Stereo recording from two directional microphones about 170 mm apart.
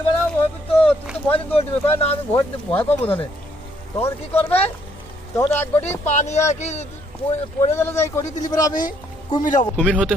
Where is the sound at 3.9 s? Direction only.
10° left (ahead or behind).